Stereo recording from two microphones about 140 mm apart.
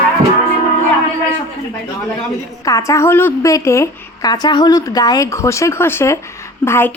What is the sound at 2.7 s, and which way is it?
A woman's voice, 25° left (ahead or behind).